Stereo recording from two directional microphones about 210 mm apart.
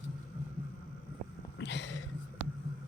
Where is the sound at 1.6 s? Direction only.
55° left (ahead or behind).